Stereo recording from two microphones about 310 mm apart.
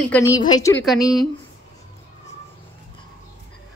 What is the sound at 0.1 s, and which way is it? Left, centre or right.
Speech, centre.